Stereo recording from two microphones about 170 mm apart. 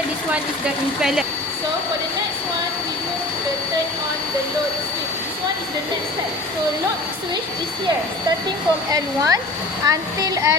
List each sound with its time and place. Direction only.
8.9 s speech: 20° right (ahead or behind)